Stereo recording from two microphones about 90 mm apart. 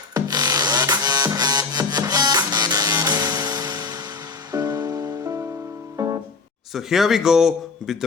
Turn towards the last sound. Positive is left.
turn(degrees=-5)  # may be behind; listen again after turning